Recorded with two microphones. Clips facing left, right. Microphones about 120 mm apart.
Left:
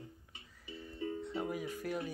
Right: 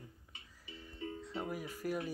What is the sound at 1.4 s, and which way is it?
Speech, 5° right (ahead or behind).